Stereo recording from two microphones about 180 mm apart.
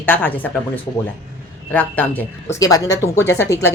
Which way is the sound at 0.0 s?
10° left (ahead or behind).